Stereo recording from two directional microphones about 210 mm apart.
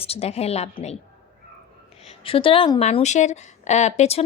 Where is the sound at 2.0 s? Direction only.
25° left (ahead or behind).